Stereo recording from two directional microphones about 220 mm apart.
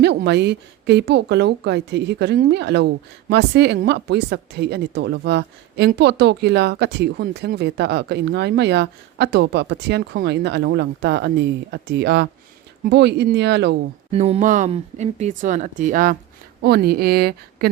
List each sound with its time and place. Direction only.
0.0 s a woman's voice: 50° right (ahead or behind)
14.1 s a woman's voice: 30° right (ahead or behind); by 17.7 s 45° right (ahead or behind)